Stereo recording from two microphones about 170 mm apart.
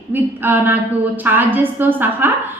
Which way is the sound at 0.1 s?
10° right (ahead or behind).